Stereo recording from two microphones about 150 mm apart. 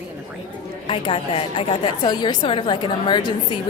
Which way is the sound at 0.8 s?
35° left (ahead or behind).